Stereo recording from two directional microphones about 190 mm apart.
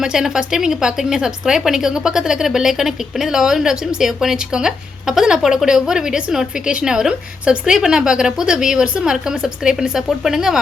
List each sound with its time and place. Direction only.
0.0 s speech: 5° right (ahead or behind)